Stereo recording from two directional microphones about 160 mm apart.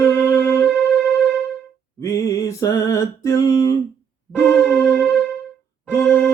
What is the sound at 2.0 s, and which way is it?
Mantra, 20° left (ahead or behind).